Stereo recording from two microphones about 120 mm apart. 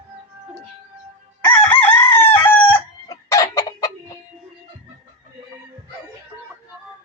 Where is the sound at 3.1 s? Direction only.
30° left (ahead or behind).